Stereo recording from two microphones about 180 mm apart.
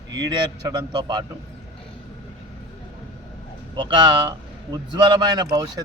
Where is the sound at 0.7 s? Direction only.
25° right (ahead or behind).